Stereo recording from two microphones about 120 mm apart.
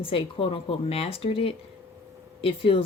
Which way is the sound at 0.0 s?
50° left (ahead or behind).